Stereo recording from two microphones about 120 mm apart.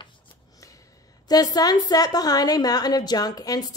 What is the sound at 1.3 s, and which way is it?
A woman's voice, 30° left (ahead or behind).